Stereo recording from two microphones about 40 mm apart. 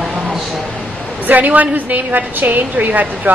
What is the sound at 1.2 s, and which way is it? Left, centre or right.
A woman's voice, right.